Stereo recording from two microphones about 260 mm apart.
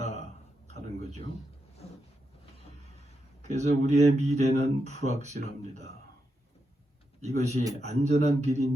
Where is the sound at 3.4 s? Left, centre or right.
Right.